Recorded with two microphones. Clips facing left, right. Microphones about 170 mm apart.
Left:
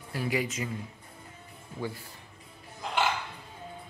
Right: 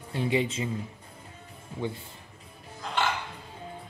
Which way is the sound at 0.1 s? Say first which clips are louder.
Right 4 dB; 25° right (ahead or behind).